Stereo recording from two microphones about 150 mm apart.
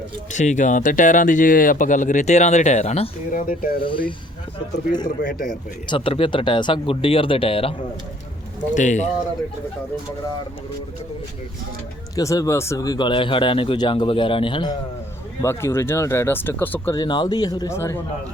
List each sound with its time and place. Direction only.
0.3 s speech: 55° left (ahead or behind)
3.4 s speech: 70° left (ahead or behind)
3.8 s speech: 35° left (ahead or behind)
5.0 s speech: 65° left (ahead or behind)
5.9 s speech: 35° left (ahead or behind)
8.7 s speech: 55° left (ahead or behind)
12.1 s speech: 25° left (ahead or behind)
15.4 s speech: 15° left (ahead or behind)
16.9 s speech: 30° left (ahead or behind)